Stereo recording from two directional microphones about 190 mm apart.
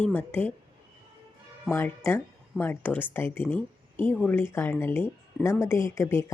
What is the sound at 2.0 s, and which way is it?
Speech, 10° left (ahead or behind).